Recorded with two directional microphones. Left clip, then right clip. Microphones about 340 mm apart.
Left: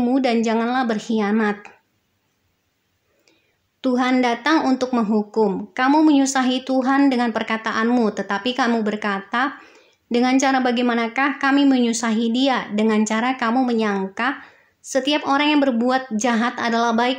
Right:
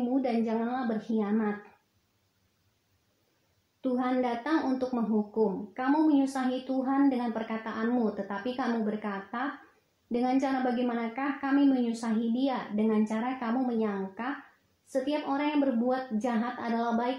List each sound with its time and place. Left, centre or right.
0.1 s a woman's voice: right
3.8 s a woman's voice: right